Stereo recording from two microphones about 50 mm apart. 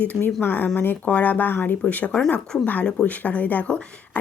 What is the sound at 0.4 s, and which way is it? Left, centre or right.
A woman's voice, left.